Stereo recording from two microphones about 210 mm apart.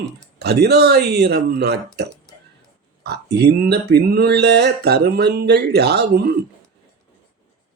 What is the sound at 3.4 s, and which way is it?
Speech, 50° right (ahead or behind).